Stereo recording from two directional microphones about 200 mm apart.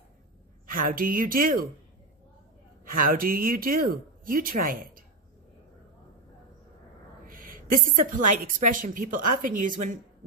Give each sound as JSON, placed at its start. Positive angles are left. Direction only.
{"t": 0.7, "sound": "a woman's voice", "side_deg": -45}
{"t": 2.9, "sound": "a woman's voice", "side_deg": -45}
{"t": 7.3, "sound": "a woman's voice", "side_deg": -45}